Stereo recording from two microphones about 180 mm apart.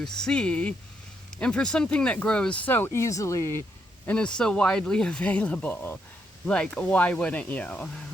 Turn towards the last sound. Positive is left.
turn(degrees=5)  # may be behind; listen again after turning